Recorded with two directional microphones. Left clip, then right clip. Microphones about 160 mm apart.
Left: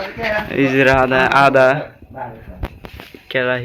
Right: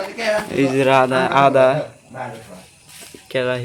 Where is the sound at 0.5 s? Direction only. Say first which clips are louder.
Left 2 dB; centre (ahead or behind).